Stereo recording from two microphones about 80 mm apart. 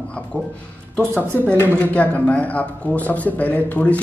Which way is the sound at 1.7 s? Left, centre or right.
Centre.